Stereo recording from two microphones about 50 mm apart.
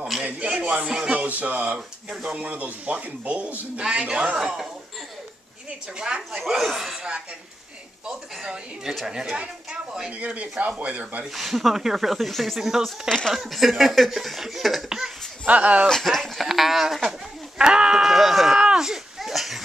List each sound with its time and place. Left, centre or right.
0.2 s music: right
1.0 s speech: right
5.9 s a woman's voice: centre
6.4 s speech: centre
8.1 s a woman's voice: centre
10.1 s speech: right
11.3 s speech: centre
12.5 s a woman's voice: centre
15.4 s speech: right
15.9 s speech: centre
17.6 s sheep: centre
18.6 s a sound: centre